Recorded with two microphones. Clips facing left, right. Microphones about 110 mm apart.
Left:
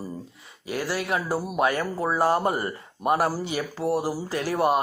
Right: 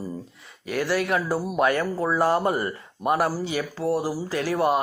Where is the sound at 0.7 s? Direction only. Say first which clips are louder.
Right 3 dB; 30° left (ahead or behind).